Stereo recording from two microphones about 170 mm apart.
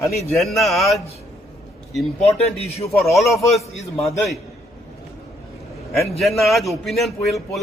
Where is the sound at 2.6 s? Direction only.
35° left (ahead or behind).